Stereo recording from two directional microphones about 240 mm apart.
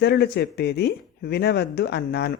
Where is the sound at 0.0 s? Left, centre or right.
Left.